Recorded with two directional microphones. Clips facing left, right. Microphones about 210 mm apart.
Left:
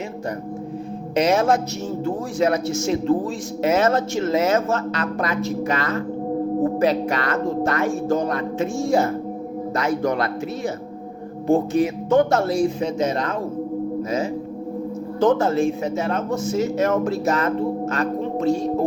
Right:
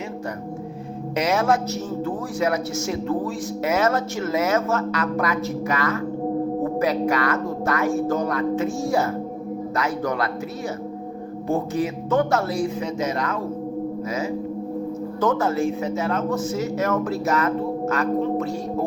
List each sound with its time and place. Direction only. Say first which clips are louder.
1.1 s speech: left 3 dB; 25° left (ahead or behind)
11.4 s speech: left 5 dB; 30° left (ahead or behind)
15.2 s speech: left 4 dB; 30° left (ahead or behind)